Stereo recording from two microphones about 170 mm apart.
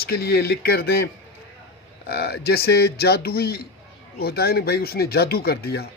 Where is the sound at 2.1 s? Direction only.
70° left (ahead or behind).